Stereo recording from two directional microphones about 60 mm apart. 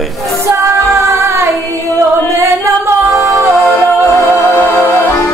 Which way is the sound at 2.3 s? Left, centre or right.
Right.